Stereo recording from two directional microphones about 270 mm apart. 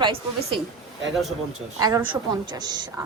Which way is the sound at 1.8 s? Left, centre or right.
Centre.